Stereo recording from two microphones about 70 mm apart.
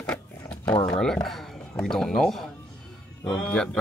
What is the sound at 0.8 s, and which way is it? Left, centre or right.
Speech, centre.